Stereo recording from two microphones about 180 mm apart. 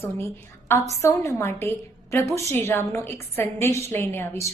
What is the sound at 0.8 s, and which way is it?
A woman's voice, 15° left (ahead or behind).